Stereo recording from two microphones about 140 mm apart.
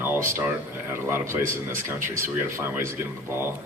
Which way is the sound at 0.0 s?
15° right (ahead or behind).